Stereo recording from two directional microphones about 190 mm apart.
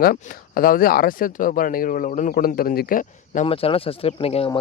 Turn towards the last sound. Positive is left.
turn(degrees=30)  # may be behind; listen again after turning